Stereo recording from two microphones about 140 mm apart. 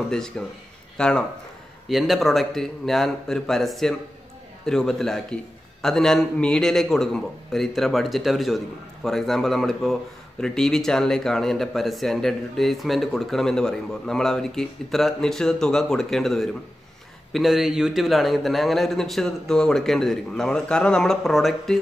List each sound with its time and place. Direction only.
0.1 s speech: 5° left (ahead or behind)